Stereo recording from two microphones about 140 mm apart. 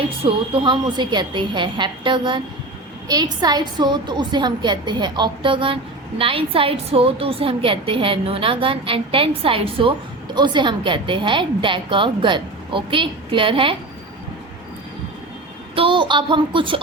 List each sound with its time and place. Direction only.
0.3 s a woman's voice: 35° right (ahead or behind)
15.7 s a woman's voice: 40° right (ahead or behind)